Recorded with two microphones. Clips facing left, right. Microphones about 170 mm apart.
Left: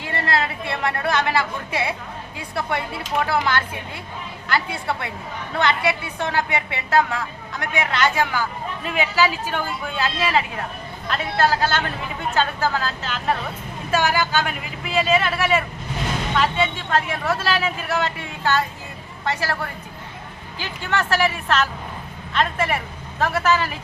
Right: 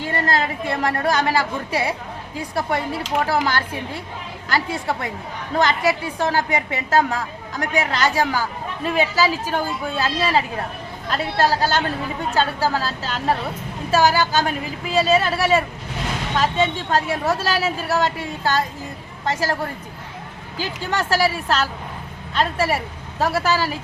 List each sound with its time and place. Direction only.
0.0 s a woman's voice: 35° right (ahead or behind)
20.6 s a woman's voice: 35° right (ahead or behind)